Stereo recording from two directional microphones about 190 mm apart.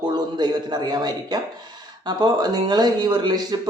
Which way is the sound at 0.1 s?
25° right (ahead or behind).